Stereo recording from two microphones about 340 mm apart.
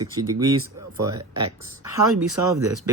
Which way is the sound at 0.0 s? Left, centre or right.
Centre.